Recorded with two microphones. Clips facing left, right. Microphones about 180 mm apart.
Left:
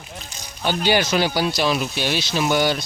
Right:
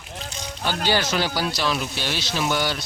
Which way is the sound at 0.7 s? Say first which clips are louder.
Left 4 dB; 15° left (ahead or behind).